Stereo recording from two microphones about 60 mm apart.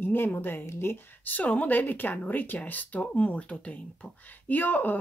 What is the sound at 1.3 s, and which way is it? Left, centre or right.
Speech, left.